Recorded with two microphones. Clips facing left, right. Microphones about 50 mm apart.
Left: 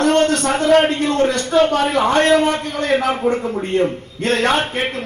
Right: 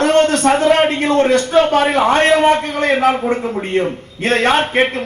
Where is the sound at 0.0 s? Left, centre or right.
Right.